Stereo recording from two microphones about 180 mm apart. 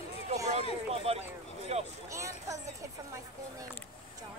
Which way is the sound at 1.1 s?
35° right (ahead or behind).